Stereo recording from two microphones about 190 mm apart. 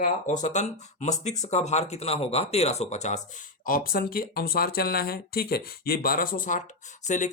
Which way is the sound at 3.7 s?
50° left (ahead or behind).